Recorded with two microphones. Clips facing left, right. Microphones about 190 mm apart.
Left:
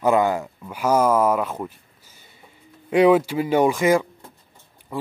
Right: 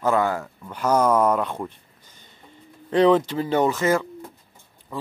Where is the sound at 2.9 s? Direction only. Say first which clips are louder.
Left 2 dB; 10° left (ahead or behind).